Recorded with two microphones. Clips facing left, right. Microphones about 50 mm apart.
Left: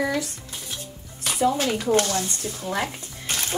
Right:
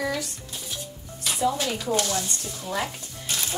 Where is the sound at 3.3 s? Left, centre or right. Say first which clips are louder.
Left 2 dB; left.